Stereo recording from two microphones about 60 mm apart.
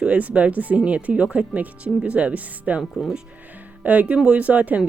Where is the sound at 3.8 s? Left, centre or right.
Right.